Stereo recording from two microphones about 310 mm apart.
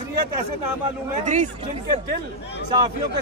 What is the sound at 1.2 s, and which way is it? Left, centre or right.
Speech, right.